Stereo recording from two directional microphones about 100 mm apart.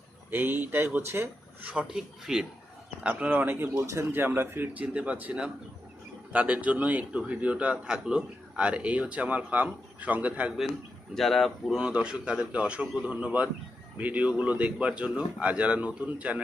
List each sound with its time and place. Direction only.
0.3 s speech: 20° right (ahead or behind)
1.7 s a man's voice: 10° right (ahead or behind)
11.1 s speech: centre (ahead or behind)
11.8 s a man's voice: 10° right (ahead or behind)